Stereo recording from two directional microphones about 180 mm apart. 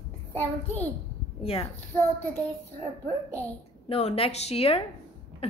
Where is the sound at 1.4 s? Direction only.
30° left (ahead or behind).